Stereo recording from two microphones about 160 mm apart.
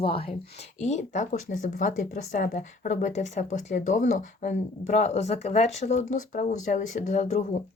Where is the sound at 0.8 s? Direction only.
50° left (ahead or behind).